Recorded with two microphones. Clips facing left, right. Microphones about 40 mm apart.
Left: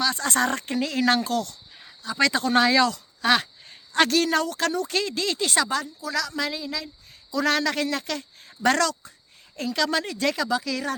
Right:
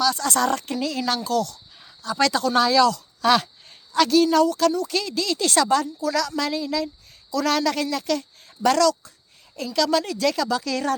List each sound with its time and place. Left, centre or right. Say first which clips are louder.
0.0 s speech: right 2 dB; left
2.0 s speech: right 1 dB; centre; by 2.8 s left
2.8 s a sound: right 4 dB; centre
3.9 s a woman's voice: right 4 dB; left
5.4 s a woman's voice: right 6 dB; centre
7.3 s speech: right 1 dB; left; by 10.9 s centre